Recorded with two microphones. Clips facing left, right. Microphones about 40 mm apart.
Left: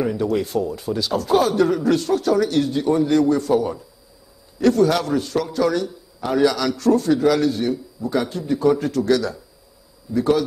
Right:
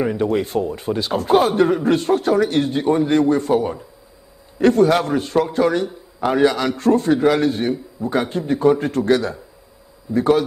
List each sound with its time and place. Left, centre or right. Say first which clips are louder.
0.0 s a man's voice: right 2 dB; right